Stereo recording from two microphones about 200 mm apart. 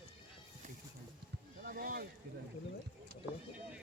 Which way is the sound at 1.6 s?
45° right (ahead or behind).